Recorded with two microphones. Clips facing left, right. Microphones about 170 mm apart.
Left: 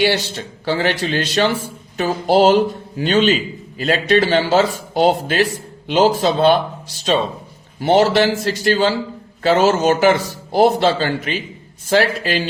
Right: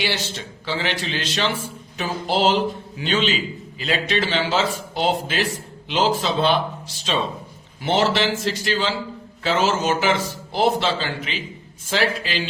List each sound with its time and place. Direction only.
0.0 s speech: 40° left (ahead or behind)
7.8 s speech: 40° left (ahead or behind)